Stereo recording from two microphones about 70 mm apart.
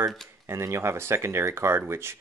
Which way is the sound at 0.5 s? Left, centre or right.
Right.